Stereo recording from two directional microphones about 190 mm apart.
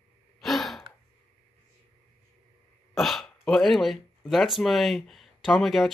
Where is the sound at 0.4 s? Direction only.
Centre (ahead or behind).